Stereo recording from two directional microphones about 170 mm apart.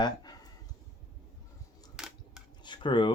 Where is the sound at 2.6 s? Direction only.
25° left (ahead or behind).